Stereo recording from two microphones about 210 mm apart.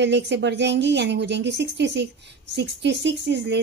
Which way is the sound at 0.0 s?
55° right (ahead or behind).